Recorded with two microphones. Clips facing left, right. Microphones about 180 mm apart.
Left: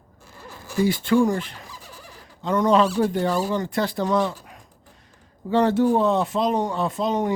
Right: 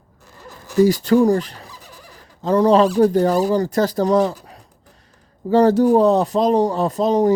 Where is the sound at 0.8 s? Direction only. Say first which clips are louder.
Right 5 dB; 40° right (ahead or behind).